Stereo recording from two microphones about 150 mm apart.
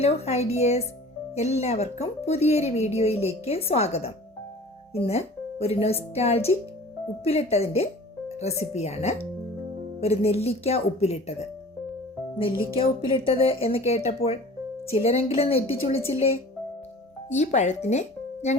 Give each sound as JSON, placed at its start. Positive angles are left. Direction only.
{"t": 0.0, "sound": "speech", "side_deg": 45}
{"t": 17.2, "sound": "speech", "side_deg": 50}